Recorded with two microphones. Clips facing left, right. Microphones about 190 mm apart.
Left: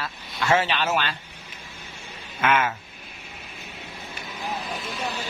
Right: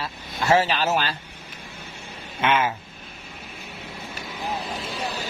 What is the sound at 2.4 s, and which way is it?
Speech, 30° right (ahead or behind).